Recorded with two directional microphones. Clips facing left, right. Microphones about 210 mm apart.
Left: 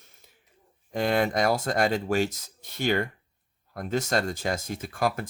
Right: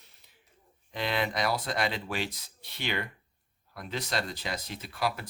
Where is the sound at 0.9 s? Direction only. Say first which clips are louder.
Left 7 dB; 45° left (ahead or behind).